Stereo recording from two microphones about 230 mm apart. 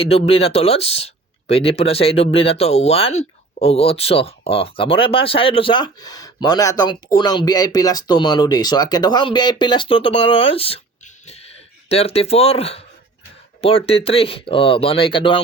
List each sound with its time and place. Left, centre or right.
0.0 s speech: left